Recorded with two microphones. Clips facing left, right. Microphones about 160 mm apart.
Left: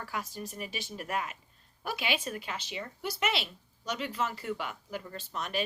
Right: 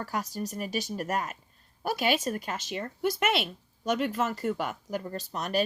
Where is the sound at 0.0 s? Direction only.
40° right (ahead or behind).